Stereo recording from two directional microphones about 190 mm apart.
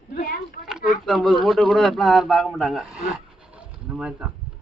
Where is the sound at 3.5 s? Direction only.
5° right (ahead or behind).